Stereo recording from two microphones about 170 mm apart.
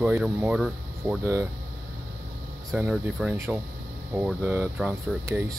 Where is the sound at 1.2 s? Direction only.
15° right (ahead or behind).